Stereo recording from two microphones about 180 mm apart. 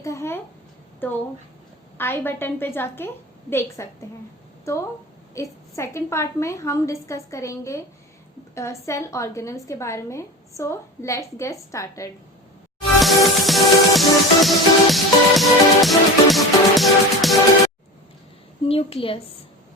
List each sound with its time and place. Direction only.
0.0 s a sound: 15° left (ahead or behind)
1.0 s a woman's voice: 10° left (ahead or behind)
13.0 s music: centre (ahead or behind)
18.7 s a woman's voice: 30° left (ahead or behind)